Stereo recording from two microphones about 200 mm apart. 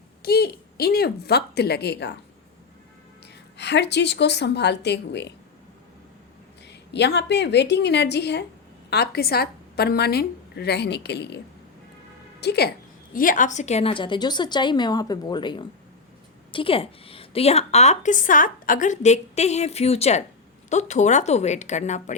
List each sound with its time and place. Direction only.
0.2 s a woman's voice: 50° left (ahead or behind)
3.6 s a woman's voice: 60° left (ahead or behind)
6.7 s a woman's voice: 60° left (ahead or behind)
12.4 s a woman's voice: 55° left (ahead or behind)
13.1 s a woman's voice: 40° left (ahead or behind)